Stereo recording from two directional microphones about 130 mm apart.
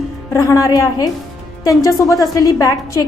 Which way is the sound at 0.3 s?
25° left (ahead or behind).